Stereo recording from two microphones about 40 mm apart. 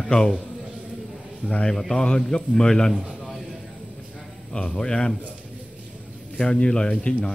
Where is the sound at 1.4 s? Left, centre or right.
Centre.